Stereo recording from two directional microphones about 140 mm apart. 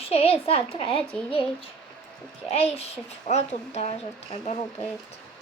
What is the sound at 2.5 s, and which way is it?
A woman's voice, 45° left (ahead or behind).